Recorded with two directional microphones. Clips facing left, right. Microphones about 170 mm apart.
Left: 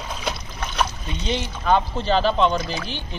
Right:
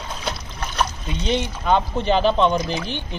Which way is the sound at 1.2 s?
20° right (ahead or behind).